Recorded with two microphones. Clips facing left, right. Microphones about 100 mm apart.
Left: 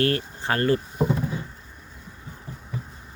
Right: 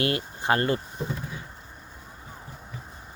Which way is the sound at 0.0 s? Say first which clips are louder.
Left 3 dB; 20° right (ahead or behind).